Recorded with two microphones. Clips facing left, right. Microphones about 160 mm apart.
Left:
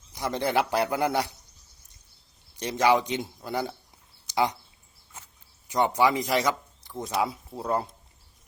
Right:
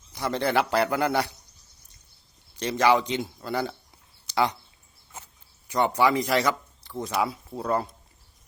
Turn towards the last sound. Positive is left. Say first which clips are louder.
# right 1 dB
turn(degrees=20)  # may be behind; listen again after turning